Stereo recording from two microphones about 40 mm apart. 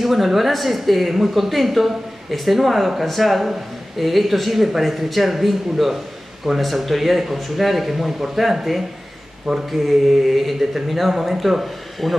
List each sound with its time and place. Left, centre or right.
0.0 s a woman's voice: centre